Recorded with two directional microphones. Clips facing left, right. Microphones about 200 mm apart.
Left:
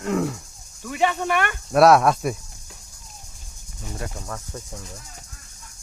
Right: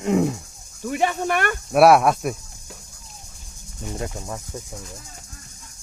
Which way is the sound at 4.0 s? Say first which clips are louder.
Right 2 dB; 20° right (ahead or behind).